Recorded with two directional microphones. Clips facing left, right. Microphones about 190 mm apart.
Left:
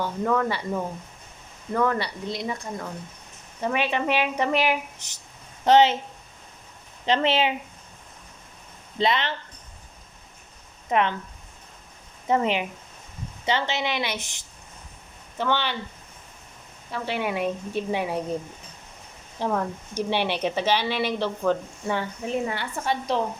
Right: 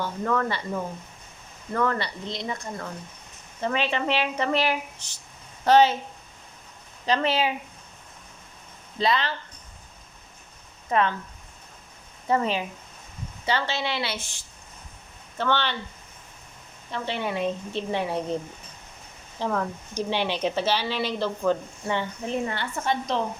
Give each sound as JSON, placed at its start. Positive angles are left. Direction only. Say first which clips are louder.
{"t": 0.0, "sound": "a woman's voice", "louder": "left 2 dB", "side_deg": 10}
{"t": 7.0, "sound": "a woman's voice", "louder": "left 2 dB", "side_deg": 25}
{"t": 9.0, "sound": "a woman's voice", "louder": "left 1 dB", "side_deg": 20}
{"t": 10.8, "sound": "speech", "louder": "even", "side_deg": 20}
{"t": 12.3, "sound": "a woman's voice", "louder": "left 1 dB", "side_deg": 20}
{"t": 15.4, "sound": "speech", "louder": "even", "side_deg": 15}
{"t": 16.9, "sound": "speech", "louder": "left 1 dB", "side_deg": 10}
{"t": 19.4, "sound": "speech", "louder": "left 1 dB", "side_deg": 15}